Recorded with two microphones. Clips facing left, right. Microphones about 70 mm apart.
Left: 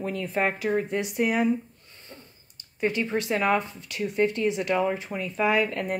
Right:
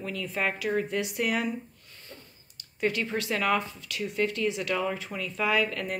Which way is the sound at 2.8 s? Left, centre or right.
Left.